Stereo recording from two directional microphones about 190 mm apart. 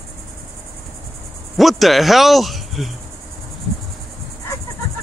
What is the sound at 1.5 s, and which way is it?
Speech, centre (ahead or behind).